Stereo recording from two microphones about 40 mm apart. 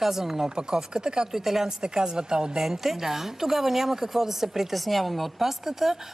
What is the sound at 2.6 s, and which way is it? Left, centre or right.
A woman's voice, centre.